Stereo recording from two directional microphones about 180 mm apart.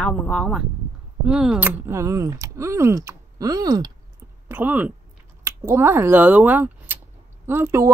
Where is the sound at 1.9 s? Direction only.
15° right (ahead or behind).